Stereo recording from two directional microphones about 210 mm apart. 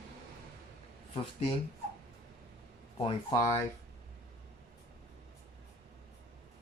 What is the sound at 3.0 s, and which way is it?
Speech, 20° left (ahead or behind).